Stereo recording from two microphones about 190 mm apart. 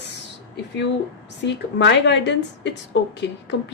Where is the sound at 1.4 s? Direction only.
65° left (ahead or behind).